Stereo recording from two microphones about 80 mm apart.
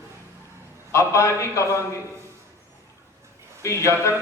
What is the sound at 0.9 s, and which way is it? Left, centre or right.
Speech, left.